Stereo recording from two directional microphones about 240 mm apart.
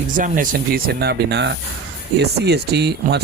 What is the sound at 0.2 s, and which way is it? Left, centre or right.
Speech, right.